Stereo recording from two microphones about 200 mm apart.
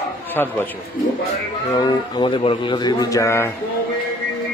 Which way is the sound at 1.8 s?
20° left (ahead or behind).